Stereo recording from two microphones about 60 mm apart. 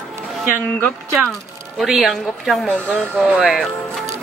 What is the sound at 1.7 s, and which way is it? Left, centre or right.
A woman's voice, centre.